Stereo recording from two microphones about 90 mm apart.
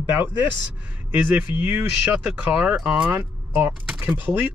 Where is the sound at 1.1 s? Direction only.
20° right (ahead or behind); by 3.1 s 5° right (ahead or behind).